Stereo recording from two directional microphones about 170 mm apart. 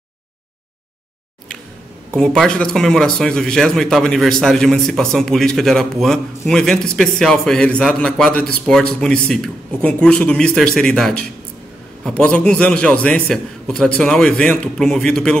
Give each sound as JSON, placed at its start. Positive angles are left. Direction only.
{"t": 2.1, "sound": "speech", "side_deg": 5}